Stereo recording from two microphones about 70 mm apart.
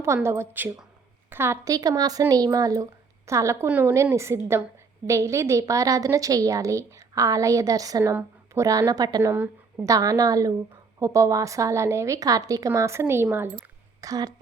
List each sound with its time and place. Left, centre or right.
0.0 s a woman's voice: right
1.6 s a woman's voice: right
3.2 s a woman's voice: right
8.0 s speech: right
8.9 s a woman's voice: right
9.2 s a woman's voice: right
9.8 s a woman's voice: right
14.0 s a woman's voice: right